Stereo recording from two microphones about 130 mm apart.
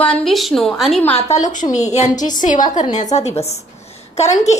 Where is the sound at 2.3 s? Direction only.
80° left.